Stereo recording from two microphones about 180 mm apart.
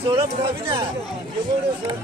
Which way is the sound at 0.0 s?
25° right (ahead or behind).